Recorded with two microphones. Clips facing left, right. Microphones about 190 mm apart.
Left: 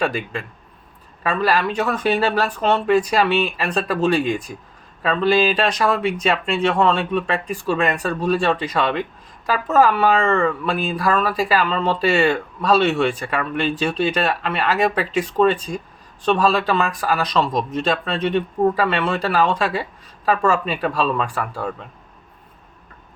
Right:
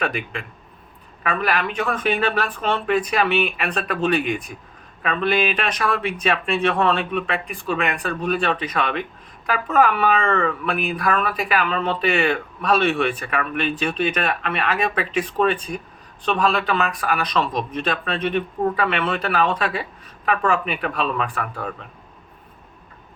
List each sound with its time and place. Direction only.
1.2 s speech: 30° left (ahead or behind)